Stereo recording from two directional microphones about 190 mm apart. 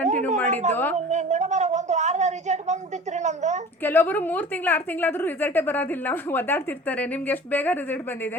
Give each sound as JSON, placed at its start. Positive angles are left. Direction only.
{"t": 0.0, "sound": "a sound", "side_deg": -35}
{"t": 0.7, "sound": "a woman's voice", "side_deg": 10}
{"t": 0.9, "sound": "a woman's voice", "side_deg": -40}
{"t": 3.8, "sound": "a woman's voice", "side_deg": 10}